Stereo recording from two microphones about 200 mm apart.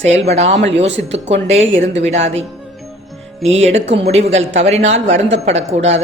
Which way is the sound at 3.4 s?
30° right (ahead or behind).